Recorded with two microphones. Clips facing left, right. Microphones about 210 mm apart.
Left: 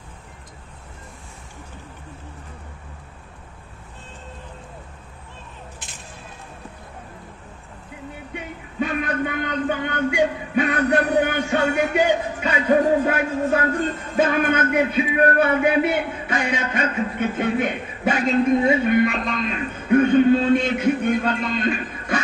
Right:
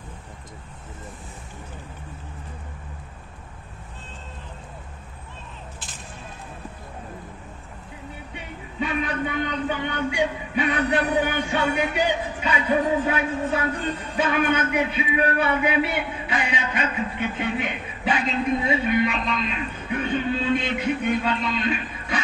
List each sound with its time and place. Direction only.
8.7 s a man's voice: 50° left (ahead or behind)